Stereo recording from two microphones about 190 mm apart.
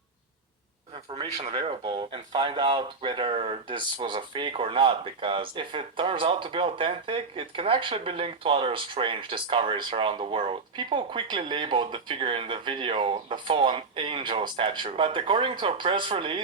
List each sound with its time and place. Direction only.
1.1 s speech: 30° right (ahead or behind)